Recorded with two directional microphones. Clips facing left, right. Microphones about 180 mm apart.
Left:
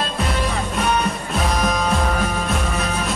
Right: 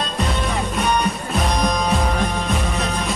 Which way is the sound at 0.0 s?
Centre (ahead or behind).